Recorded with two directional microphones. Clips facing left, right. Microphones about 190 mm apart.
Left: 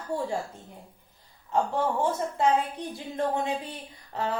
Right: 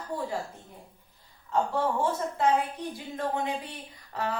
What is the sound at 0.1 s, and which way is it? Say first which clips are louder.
Speech: left 3 dB; 25° left (ahead or behind).